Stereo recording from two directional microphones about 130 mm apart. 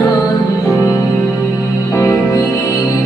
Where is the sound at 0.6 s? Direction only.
25° left (ahead or behind).